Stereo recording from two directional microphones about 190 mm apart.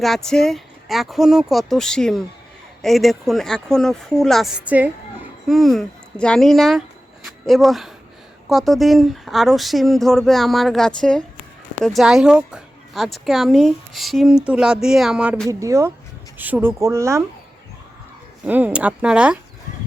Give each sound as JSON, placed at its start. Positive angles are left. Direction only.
{"t": 0.0, "sound": "speech", "side_deg": 0}
{"t": 15.4, "sound": "speech", "side_deg": -15}
{"t": 18.4, "sound": "speech", "side_deg": -10}